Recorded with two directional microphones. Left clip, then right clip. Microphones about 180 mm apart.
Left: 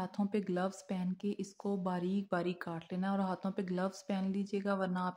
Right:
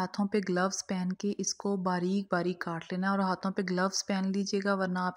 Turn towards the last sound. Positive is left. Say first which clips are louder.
# right 5 dB
turn(degrees=-30)  # may be behind; listen again after turning